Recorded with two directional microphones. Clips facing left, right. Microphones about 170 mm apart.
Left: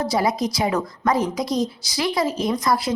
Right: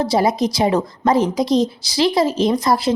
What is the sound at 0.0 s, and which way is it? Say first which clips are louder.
A woman's voice: right 4 dB; 25° right (ahead or behind).